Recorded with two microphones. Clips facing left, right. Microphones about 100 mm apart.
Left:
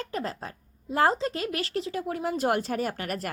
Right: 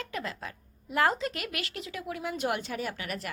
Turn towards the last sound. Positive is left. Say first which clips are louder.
# left 5 dB
turn(degrees=45)  # may be behind; listen again after turning